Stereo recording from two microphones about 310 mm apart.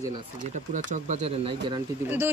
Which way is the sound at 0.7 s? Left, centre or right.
Right.